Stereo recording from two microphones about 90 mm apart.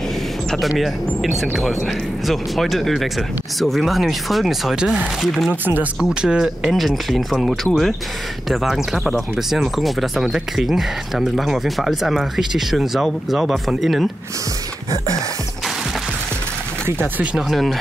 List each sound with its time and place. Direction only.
0.5 s speech: centre (ahead or behind)
5.5 s speech: 20° right (ahead or behind)
5.9 s speech: 5° right (ahead or behind)
16.8 s speech: 15° right (ahead or behind)
17.5 s speech: centre (ahead or behind)